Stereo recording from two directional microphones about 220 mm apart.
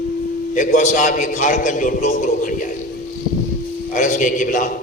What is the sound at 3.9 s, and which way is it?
Speech, 35° left (ahead or behind).